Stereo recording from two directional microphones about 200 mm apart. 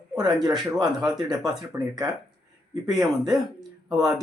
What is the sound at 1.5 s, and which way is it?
Speech, 20° right (ahead or behind).